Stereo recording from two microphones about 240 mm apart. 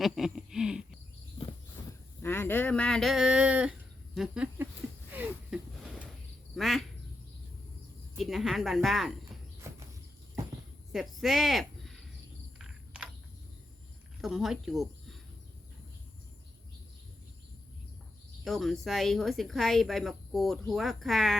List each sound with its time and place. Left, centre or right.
0.0 s a sound: centre
1.8 s a sound: centre
2.2 s speech: centre
5.1 s wheeze: centre
6.6 s quack: centre
8.2 s speech: centre
10.9 s speech: centre
12.5 s a sound: centre
14.2 s speech: centre
18.4 s speech: centre